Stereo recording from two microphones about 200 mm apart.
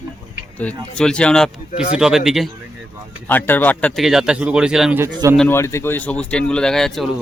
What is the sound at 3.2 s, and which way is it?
Speech, 10° left (ahead or behind).